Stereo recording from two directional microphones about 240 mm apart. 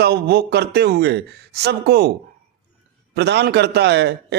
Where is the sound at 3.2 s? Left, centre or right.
Right.